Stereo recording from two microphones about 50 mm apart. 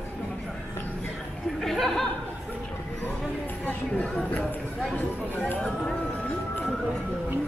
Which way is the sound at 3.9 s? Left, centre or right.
Left.